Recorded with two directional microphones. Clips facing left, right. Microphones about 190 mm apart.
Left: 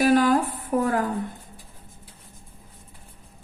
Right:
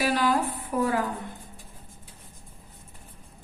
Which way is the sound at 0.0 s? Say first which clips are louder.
Left 6 dB; 45° left (ahead or behind).